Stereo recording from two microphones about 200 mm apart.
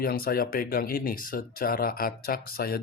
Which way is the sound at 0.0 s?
50° left (ahead or behind).